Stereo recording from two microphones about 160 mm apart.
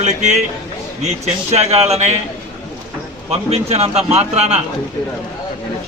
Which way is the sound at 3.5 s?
40° right (ahead or behind).